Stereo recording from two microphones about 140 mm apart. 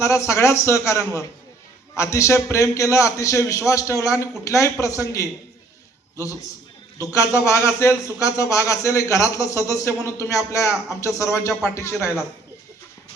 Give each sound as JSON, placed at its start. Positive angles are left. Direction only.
{"t": 0.0, "sound": "a man's voice", "side_deg": 20}